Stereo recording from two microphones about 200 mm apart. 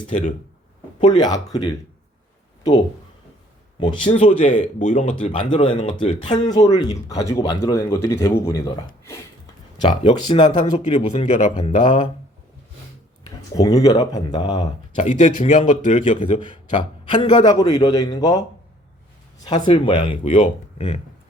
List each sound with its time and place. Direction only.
0.1 s a man's voice: 35° left (ahead or behind)
1.0 s speech: 20° left (ahead or behind)
3.8 s speech: 25° left (ahead or behind)
4.3 s a man's voice: 40° left (ahead or behind); by 8.8 s 15° left (ahead or behind)
10.0 s speech: 25° left (ahead or behind)
10.9 s a man's voice: 35° left (ahead or behind)
13.2 s speech: 15° left (ahead or behind)
14.9 s a man's voice: 35° left (ahead or behind)
17.1 s speech: 20° left (ahead or behind)
19.5 s speech: 20° left (ahead or behind)
20.1 s a man's voice: 35° left (ahead or behind)